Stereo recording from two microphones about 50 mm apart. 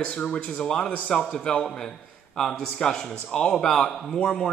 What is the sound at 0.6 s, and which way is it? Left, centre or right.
Speech, centre.